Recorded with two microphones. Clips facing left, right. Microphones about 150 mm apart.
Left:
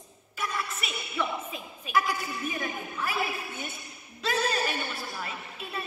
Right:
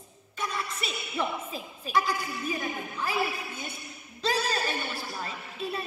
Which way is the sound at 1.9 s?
35° right (ahead or behind).